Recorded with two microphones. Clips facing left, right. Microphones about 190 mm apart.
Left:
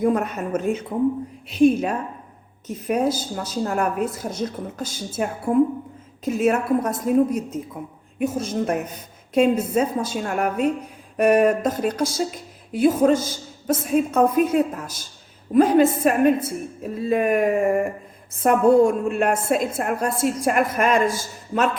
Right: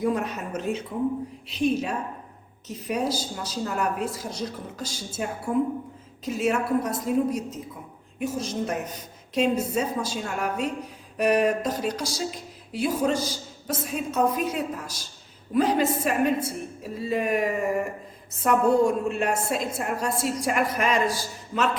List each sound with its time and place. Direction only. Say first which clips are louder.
0.0 s a woman's voice: left 5 dB; 55° left (ahead or behind)
19.0 s a woman's voice: left 5 dB; 55° left (ahead or behind)